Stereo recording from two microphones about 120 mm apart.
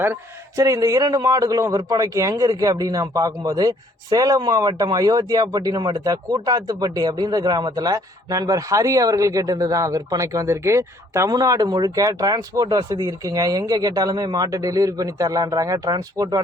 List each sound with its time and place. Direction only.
0.0 s speech: 25° right (ahead or behind)